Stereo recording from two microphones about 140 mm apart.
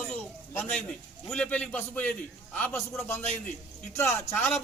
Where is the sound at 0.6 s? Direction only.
10° left (ahead or behind).